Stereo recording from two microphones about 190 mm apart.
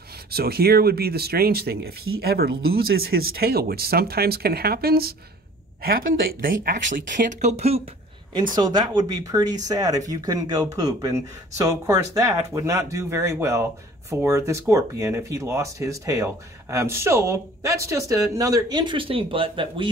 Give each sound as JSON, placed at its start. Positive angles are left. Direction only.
{"t": 0.3, "sound": "speech", "side_deg": -55}
{"t": 8.5, "sound": "speech", "side_deg": -20}